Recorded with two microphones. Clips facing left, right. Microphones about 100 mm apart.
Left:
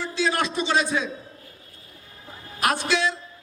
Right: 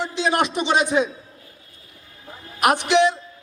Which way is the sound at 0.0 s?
20° right (ahead or behind).